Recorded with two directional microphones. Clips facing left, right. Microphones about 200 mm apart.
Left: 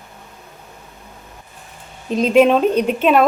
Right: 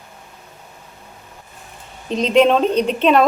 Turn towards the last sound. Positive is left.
turn(degrees=5)  # may be behind; listen again after turning